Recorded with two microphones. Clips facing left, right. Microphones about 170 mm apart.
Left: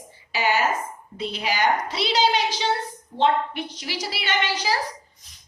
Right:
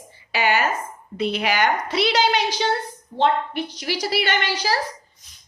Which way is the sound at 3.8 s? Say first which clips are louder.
Right 10 dB; 60° right (ahead or behind).